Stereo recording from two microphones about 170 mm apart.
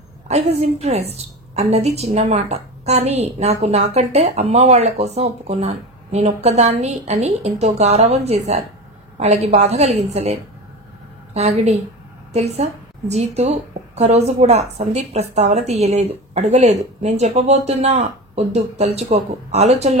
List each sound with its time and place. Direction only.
0.3 s a woman's voice: 40° right (ahead or behind)
11.3 s a woman's voice: 40° right (ahead or behind)